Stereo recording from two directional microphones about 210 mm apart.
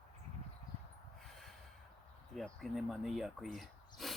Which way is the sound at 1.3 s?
Centre (ahead or behind).